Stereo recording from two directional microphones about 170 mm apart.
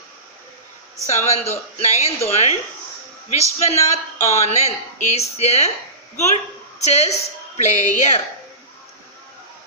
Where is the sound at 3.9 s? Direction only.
40° left (ahead or behind).